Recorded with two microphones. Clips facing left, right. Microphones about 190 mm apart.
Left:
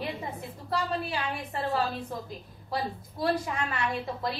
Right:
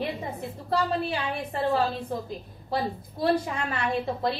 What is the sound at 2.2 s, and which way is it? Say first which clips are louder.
A woman's voice: right 5 dB; 30° right (ahead or behind).